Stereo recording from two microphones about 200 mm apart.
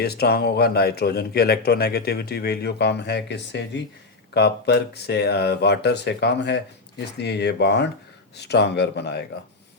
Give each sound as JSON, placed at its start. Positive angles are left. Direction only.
{"t": 0.0, "sound": "speech", "side_deg": 50}